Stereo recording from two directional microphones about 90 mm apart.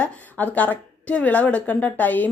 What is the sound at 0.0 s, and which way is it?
A woman's voice, 15° left (ahead or behind).